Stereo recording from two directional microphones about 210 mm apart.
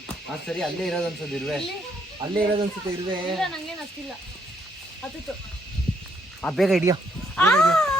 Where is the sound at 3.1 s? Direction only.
25° right (ahead or behind).